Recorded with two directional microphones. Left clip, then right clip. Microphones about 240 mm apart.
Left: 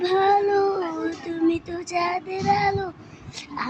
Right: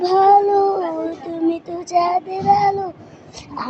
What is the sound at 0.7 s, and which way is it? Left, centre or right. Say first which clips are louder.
Howl: right 5 dB; left.